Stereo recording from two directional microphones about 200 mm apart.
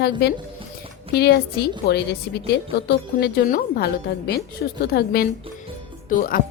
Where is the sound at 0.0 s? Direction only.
55° left (ahead or behind).